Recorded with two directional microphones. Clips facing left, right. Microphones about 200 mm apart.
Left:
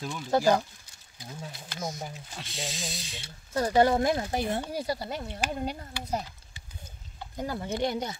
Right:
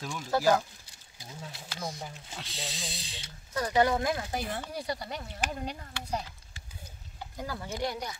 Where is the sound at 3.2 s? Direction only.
25° left (ahead or behind).